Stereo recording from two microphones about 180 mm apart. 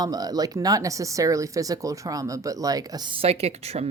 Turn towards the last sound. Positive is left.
turn(degrees=-35)  # may be behind; listen again after turning